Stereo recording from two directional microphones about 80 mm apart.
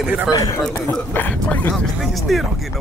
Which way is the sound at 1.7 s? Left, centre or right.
Centre.